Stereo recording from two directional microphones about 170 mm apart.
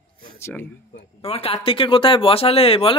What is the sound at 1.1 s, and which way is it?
Speech, 35° left (ahead or behind).